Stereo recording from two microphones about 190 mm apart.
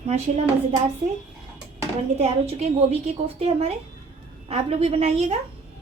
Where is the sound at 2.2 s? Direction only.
35° right (ahead or behind).